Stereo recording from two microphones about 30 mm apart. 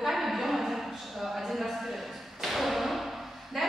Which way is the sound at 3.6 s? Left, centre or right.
Centre.